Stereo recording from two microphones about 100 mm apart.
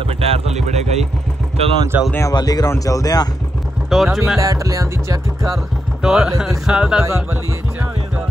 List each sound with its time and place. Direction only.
0.2 s speech: 90° right
2.3 s speech: 40° left (ahead or behind)
3.9 s speech: 5° right (ahead or behind)
4.4 s music: 35° right (ahead or behind)
6.0 s speech: 5° right (ahead or behind)